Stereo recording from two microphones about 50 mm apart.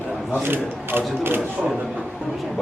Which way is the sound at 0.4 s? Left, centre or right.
Right.